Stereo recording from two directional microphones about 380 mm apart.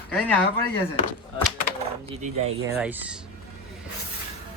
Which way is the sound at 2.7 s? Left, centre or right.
Centre.